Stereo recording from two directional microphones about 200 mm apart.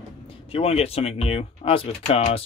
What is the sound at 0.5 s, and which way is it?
Speech, 30° left (ahead or behind).